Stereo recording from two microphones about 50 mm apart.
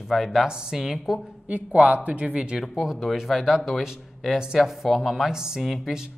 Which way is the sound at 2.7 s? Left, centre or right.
Centre.